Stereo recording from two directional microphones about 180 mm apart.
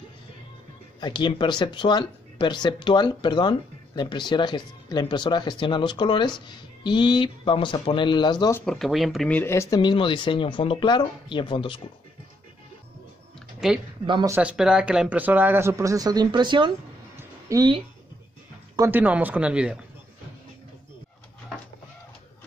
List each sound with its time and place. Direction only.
1.0 s speech: 25° left (ahead or behind)
8.5 s speech: centre (ahead or behind); by 11.8 s 30° left (ahead or behind)
13.6 s speech: centre (ahead or behind)
14.0 s speech: 25° right (ahead or behind)
14.3 s speech: 5° right (ahead or behind); by 16.7 s 25° right (ahead or behind)
17.2 s a sound: 20° right (ahead or behind)
18.8 s speech: 10° right (ahead or behind)